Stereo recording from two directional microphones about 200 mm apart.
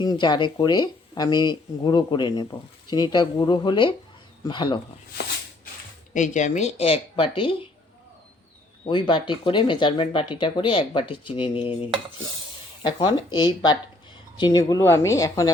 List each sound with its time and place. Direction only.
0.0 s speech: 20° left (ahead or behind)
6.1 s speech: 40° left (ahead or behind)
8.8 s speech: 25° left (ahead or behind)